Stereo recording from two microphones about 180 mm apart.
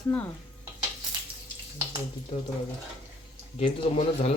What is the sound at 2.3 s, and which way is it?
Speech, 30° left (ahead or behind).